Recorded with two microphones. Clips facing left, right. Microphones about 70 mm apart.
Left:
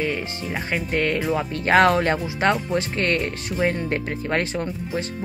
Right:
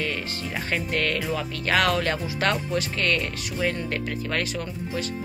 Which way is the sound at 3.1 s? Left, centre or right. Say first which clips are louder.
Left 3 dB; left.